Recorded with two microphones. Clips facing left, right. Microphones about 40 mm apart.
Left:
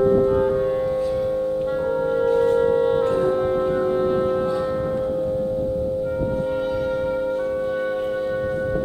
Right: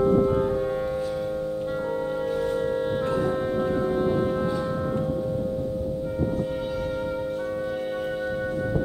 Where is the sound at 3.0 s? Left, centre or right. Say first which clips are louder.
Left 5 dB; left.